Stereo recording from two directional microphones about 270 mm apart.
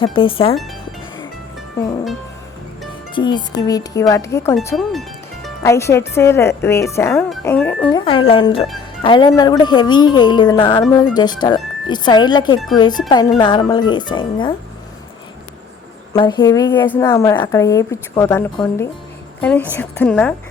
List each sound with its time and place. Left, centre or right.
0.0 s speech: centre
3.2 s a woman's voice: centre
4.5 s music: centre
5.6 s a woman's voice: centre
8.0 s a woman's voice: centre
16.1 s a woman's voice: centre